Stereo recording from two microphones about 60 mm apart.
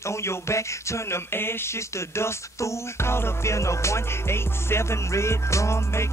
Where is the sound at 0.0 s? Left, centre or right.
Left.